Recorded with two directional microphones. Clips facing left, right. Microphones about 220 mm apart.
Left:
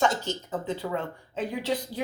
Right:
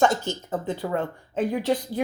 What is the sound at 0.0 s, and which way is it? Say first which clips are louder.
Speech: right 4 dB; 50° right (ahead or behind).